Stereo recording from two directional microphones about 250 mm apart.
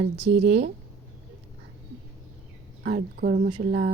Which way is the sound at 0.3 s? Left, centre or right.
Right.